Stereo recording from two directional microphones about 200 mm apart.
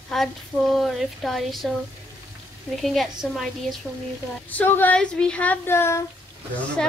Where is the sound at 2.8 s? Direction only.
Centre (ahead or behind).